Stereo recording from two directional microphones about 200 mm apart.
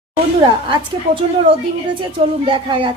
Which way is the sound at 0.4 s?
25° right (ahead or behind).